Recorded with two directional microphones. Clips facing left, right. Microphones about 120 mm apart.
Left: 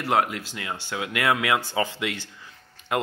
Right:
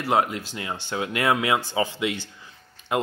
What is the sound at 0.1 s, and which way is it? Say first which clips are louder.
Speech: right 1 dB; 25° right (ahead or behind).